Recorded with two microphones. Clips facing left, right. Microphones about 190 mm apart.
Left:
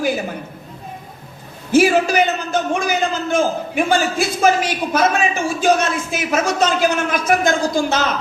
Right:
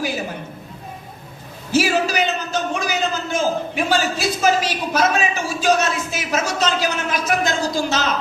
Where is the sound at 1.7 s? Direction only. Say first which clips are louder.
Left 5 dB; 50° left (ahead or behind).